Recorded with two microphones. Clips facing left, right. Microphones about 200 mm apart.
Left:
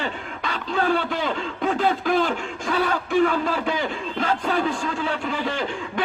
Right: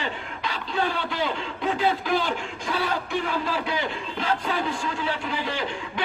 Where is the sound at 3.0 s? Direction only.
50° left (ahead or behind).